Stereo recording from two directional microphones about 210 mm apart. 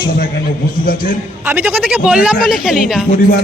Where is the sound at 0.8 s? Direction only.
40° left (ahead or behind).